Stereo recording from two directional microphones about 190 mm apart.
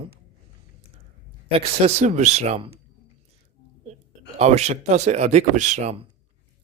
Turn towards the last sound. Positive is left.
turn(degrees=-30)  # may be behind; listen again after turning